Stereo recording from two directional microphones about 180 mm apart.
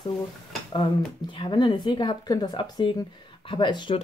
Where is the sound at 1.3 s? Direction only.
25° left (ahead or behind).